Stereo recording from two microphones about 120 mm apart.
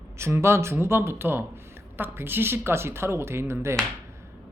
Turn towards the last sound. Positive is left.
turn(degrees=-20)  # may be behind; listen again after turning